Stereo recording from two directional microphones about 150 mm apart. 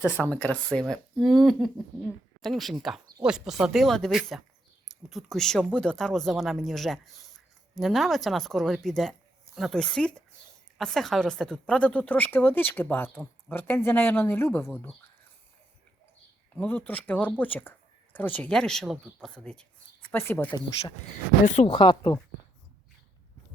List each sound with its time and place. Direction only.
0.3 s speech: 10° left (ahead or behind)
16.6 s speech: 10° left (ahead or behind)
21.4 s speech: 50° left (ahead or behind)
21.7 s speech: 30° left (ahead or behind)